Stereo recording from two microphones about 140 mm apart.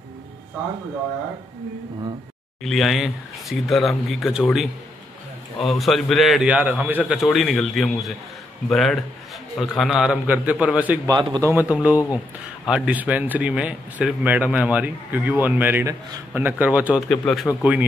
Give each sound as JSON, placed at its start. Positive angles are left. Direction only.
{"t": 2.6, "sound": "speech", "side_deg": 0}
{"t": 5.7, "sound": "speech", "side_deg": 0}
{"t": 7.3, "sound": "a man's voice", "side_deg": 0}
{"t": 11.1, "sound": "speech", "side_deg": -30}
{"t": 11.5, "sound": "a man's voice", "side_deg": -10}
{"t": 17.1, "sound": "speech", "side_deg": 5}
{"t": 17.6, "sound": "a man's voice", "side_deg": -10}